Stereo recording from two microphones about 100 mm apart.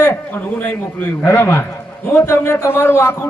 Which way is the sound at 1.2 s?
20° left (ahead or behind).